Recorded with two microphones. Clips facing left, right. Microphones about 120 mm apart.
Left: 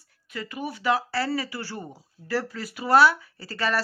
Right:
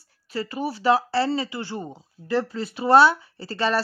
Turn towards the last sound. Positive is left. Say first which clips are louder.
# right 3 dB
turn(degrees=-25)  # may be behind; listen again after turning